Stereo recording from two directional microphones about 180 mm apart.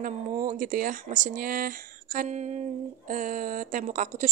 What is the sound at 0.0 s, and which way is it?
A woman's voice, 45° right (ahead or behind).